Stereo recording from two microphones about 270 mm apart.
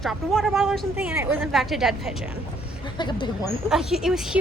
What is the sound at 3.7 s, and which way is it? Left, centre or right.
Speech, centre.